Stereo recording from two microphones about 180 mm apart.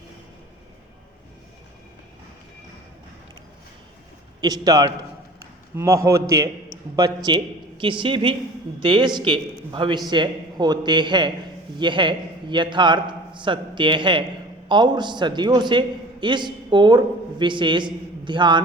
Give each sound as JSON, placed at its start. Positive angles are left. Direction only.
{"t": 4.4, "sound": "a man's voice", "side_deg": -20}